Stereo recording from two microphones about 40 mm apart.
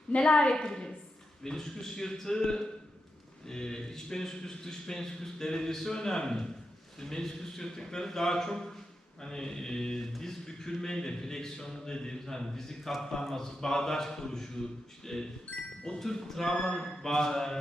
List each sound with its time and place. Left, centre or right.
0.1 s a woman's voice: left